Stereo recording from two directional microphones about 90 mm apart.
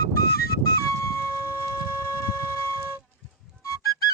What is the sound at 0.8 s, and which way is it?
Music, 30° left (ahead or behind).